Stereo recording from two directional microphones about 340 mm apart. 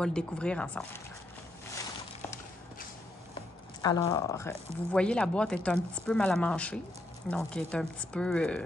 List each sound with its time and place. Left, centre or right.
0.0 s speech: centre
3.8 s speech: centre